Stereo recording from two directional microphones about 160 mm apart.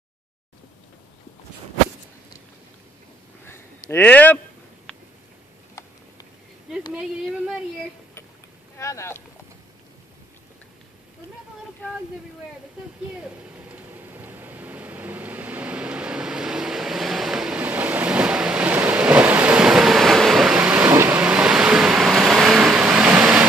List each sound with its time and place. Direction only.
3.9 s speech: 10° left (ahead or behind)
6.9 s speech: 5° right (ahead or behind)
8.7 s speech: 20° left (ahead or behind)
13.2 s vehicle: 10° right (ahead or behind)